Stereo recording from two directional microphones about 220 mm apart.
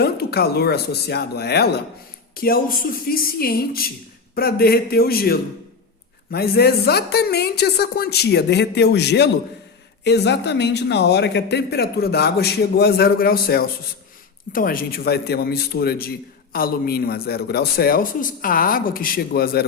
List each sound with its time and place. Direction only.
0.0 s a man's voice: 45° left (ahead or behind)